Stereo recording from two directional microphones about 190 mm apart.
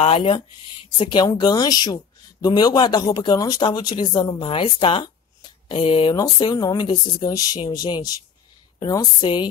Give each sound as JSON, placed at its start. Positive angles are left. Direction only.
{"t": 0.0, "sound": "speech", "side_deg": 30}